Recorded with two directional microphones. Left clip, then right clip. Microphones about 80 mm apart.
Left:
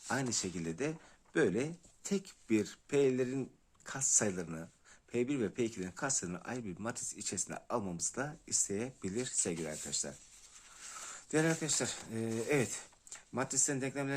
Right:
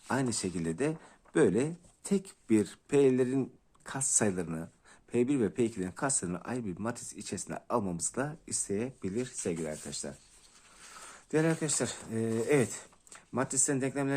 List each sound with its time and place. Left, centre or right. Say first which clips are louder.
0.1 s speech: right 4 dB; right
7.9 s speech: right 4 dB; right
8.6 s speech: right 8 dB; centre
9.0 s speech: right 2 dB; centre
11.0 s a sound: right 3 dB; centre
11.5 s speech: right 3 dB; right